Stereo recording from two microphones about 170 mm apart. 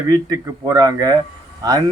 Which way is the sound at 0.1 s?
25° right (ahead or behind).